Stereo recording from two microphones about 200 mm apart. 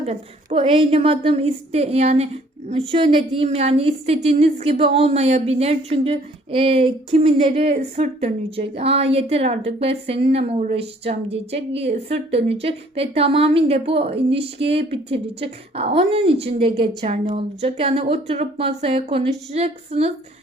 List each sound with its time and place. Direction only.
0.0 s a woman's voice: 30° right (ahead or behind)